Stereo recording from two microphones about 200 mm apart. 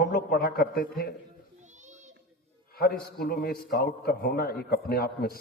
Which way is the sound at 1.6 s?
35° right (ahead or behind).